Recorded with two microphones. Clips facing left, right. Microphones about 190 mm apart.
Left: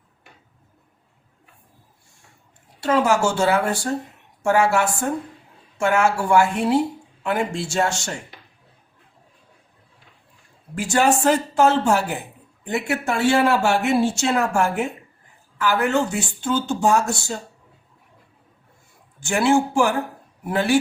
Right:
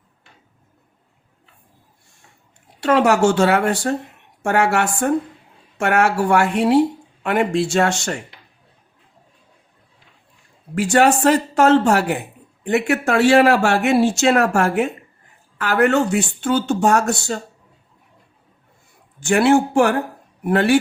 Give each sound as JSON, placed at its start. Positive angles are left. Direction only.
{"t": 2.8, "sound": "speech", "side_deg": -70}
{"t": 10.8, "sound": "speech", "side_deg": -70}
{"t": 19.2, "sound": "speech", "side_deg": -65}